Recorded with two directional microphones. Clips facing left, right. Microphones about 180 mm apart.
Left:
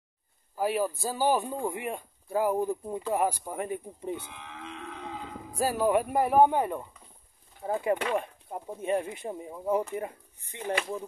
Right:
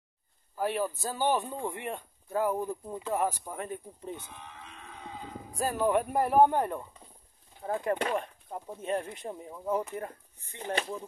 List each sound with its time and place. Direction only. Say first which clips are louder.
0.6 s a man's voice: left 3 dB; 10° left (ahead or behind)
4.3 s livestock: left 5 dB; 90° left
5.6 s a man's voice: left 2 dB; 5° left (ahead or behind)